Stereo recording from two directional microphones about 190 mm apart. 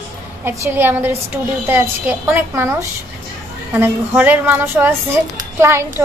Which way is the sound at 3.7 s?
10° right (ahead or behind).